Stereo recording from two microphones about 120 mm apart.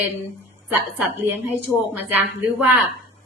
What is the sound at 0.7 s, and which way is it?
A woman's voice, 15° right (ahead or behind).